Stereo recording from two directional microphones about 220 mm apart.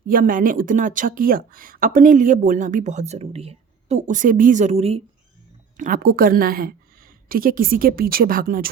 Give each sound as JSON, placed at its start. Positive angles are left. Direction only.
{"t": 0.1, "sound": "speech", "side_deg": -40}
{"t": 5.7, "sound": "speech", "side_deg": -40}